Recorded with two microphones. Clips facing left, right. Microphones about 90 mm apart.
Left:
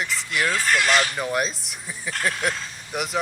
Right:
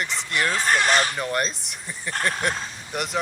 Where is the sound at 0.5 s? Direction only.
35° right (ahead or behind).